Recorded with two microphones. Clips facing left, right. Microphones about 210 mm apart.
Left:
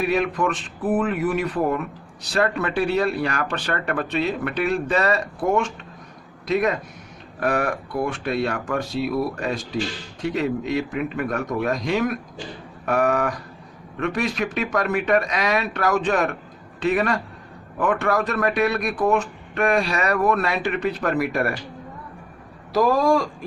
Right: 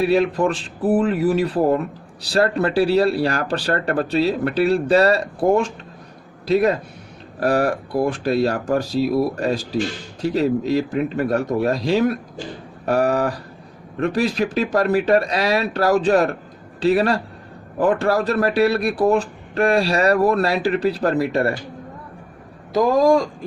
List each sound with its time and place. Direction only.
0.0 s speech: 30° right (ahead or behind)
22.7 s speech: 20° right (ahead or behind)